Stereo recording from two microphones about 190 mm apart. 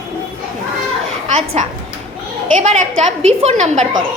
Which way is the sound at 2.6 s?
40° right (ahead or behind).